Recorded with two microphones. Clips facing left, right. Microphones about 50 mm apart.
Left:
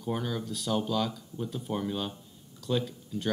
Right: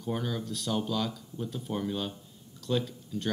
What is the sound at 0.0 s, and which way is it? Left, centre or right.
Speech, centre.